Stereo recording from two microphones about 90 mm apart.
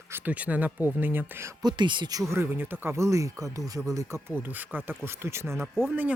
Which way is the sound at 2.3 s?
25° right (ahead or behind).